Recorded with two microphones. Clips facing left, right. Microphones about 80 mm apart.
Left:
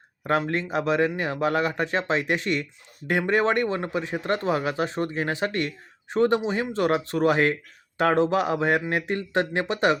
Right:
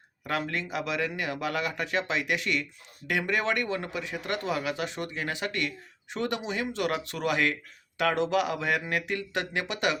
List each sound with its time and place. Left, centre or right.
0.3 s speech: left